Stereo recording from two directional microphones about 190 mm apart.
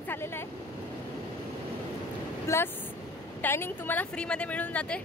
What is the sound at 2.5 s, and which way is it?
Speech, 15° left (ahead or behind).